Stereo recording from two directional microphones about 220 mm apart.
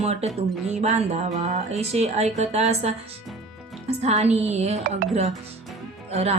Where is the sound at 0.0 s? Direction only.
30° right (ahead or behind).